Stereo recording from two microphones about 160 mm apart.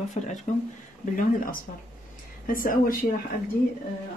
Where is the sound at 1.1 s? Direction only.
55° left (ahead or behind).